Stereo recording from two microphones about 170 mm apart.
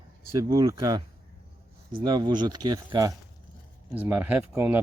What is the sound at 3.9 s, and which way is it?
Speech, 10° right (ahead or behind).